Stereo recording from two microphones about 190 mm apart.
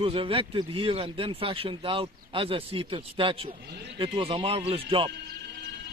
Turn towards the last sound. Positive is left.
turn(degrees=-30)  # may be behind; listen again after turning